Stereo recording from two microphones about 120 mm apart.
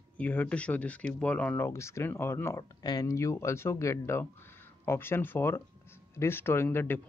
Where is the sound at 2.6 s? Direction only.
35° left (ahead or behind); by 7.0 s 15° left (ahead or behind).